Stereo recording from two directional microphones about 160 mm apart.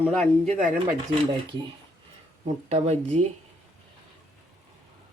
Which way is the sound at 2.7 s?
45° right (ahead or behind).